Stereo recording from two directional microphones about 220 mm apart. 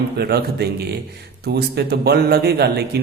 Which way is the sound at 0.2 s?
45° right (ahead or behind).